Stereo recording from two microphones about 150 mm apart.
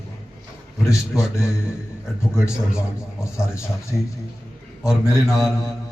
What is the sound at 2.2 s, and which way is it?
A man's voice, 5° right (ahead or behind).